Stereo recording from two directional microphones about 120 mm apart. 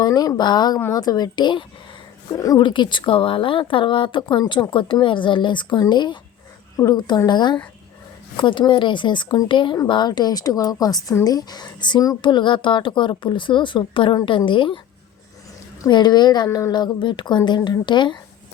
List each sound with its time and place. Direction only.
0.0 s a woman's voice: 35° left (ahead or behind)
2.3 s speech: 30° left (ahead or behind)
2.6 s a woman's voice: 40° left (ahead or behind)
15.9 s a woman's voice: 40° left (ahead or behind)